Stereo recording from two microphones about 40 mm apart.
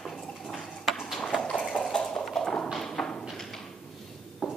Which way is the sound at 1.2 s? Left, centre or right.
Centre.